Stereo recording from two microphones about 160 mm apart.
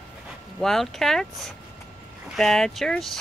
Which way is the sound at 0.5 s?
Centre (ahead or behind).